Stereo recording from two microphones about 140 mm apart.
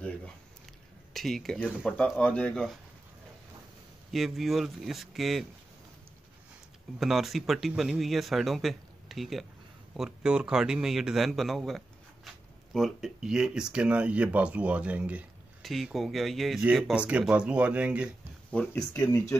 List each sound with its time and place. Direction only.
1.1 s speech: centre (ahead or behind)
1.9 s speech: 5° left (ahead or behind)
4.1 s speech: centre (ahead or behind)
7.0 s speech: centre (ahead or behind)
18.5 s speech: 10° left (ahead or behind)
19.0 s speech: 20° left (ahead or behind)